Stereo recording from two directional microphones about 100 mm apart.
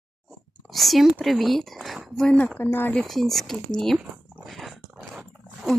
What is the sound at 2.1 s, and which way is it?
Speech, 10° left (ahead or behind).